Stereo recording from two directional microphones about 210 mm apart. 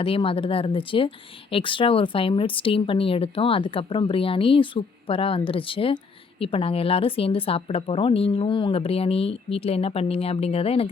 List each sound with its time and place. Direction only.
0.0 s speech: 25° left (ahead or behind)